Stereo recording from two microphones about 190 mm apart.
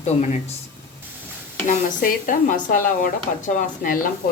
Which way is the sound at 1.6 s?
45° left (ahead or behind).